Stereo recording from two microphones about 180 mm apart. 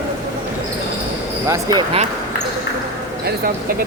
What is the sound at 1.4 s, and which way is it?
Speech, 20° right (ahead or behind).